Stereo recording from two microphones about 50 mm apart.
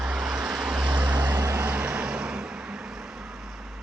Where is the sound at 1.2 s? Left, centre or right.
Right.